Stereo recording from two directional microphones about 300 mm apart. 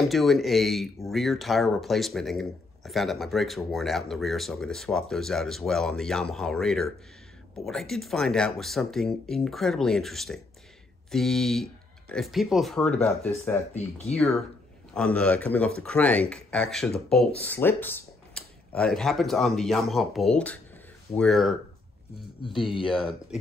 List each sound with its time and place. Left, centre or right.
0.1 s speech: centre
13.7 s speech: left
14.1 s speech: centre
22.8 s speech: centre